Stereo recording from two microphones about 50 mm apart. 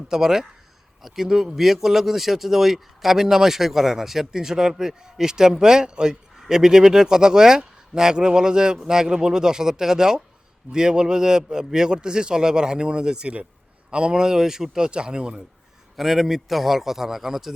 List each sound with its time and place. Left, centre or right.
0.1 s speech: centre
16.0 s a man's voice: centre